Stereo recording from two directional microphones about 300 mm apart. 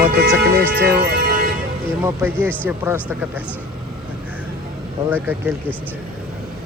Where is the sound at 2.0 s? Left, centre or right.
Centre.